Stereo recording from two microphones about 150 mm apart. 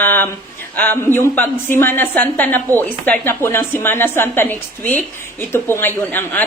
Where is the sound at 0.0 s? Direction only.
15° left (ahead or behind).